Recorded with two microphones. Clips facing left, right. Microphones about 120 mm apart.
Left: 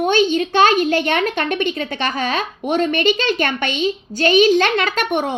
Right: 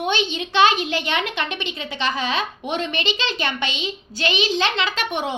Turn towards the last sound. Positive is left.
turn(degrees=50)  # may be behind; listen again after turning